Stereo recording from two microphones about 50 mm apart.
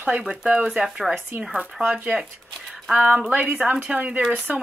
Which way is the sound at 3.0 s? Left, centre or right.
Right.